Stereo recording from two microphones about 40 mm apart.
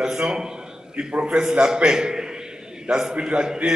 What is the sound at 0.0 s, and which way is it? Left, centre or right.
A man's voice, centre.